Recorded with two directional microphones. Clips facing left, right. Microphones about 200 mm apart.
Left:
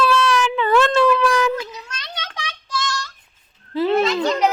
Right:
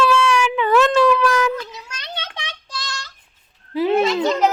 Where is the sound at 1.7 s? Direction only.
10° right (ahead or behind).